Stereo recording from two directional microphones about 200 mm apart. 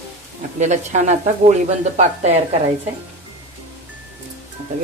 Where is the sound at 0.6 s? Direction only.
35° right (ahead or behind).